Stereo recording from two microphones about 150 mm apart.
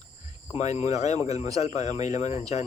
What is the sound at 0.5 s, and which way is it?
Speech, 45° left (ahead or behind).